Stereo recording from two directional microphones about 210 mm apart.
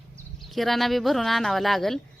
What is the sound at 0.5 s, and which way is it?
A woman's voice, centre (ahead or behind).